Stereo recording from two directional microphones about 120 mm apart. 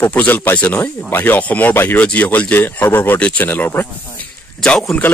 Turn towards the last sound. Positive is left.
turn(degrees=5)  # may be behind; listen again after turning